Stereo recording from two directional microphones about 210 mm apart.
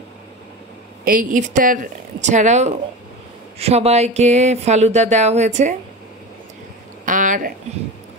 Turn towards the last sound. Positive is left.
turn(degrees=-40)  # may be behind; listen again after turning